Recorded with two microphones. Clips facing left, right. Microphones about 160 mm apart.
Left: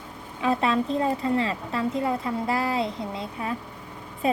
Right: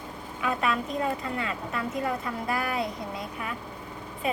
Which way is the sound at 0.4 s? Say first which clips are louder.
Left 5 dB; 30° left (ahead or behind).